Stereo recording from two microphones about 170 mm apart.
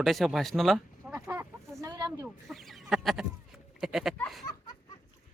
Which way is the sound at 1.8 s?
20° right (ahead or behind).